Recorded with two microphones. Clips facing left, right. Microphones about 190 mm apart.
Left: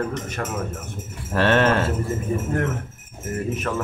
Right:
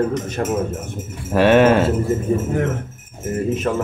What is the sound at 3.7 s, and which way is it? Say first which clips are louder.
Speech: right 5 dB; 25° right (ahead or behind).